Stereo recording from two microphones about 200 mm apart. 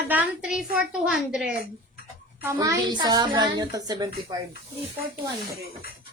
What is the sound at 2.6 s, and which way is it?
A woman's voice, 20° right (ahead or behind).